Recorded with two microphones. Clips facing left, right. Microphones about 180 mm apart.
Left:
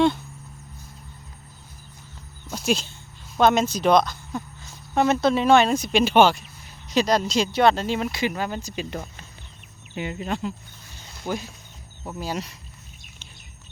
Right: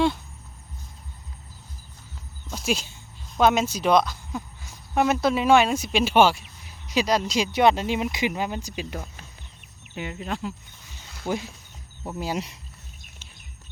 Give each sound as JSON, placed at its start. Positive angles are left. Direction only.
{"t": 2.5, "sound": "a sound", "side_deg": -5}
{"t": 3.4, "sound": "speech", "side_deg": -5}
{"t": 11.3, "sound": "speech", "side_deg": -25}